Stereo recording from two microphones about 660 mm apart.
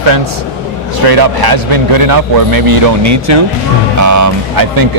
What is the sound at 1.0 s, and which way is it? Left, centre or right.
A man's voice, right.